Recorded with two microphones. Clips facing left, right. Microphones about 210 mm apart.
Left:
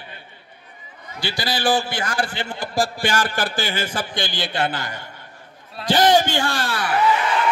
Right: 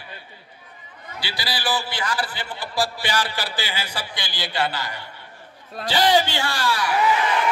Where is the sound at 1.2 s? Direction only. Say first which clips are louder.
Left 6 dB; 45° left (ahead or behind).